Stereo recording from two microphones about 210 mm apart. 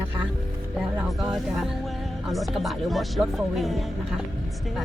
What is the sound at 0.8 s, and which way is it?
Speech, 5° right (ahead or behind).